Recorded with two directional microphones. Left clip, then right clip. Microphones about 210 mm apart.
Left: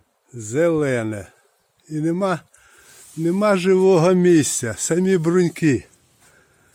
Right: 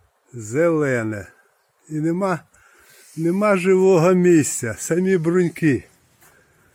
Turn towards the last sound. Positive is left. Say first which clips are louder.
# left 1 dB
turn(degrees=15)  # may be behind; listen again after turning